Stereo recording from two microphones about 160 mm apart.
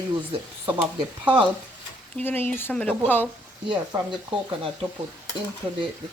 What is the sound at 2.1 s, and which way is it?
Speech, 10° left (ahead or behind).